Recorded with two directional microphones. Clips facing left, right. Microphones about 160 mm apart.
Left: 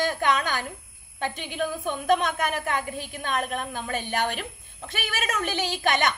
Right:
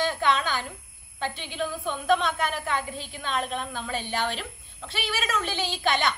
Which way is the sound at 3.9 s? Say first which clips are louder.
Left 2 dB; 50° left (ahead or behind).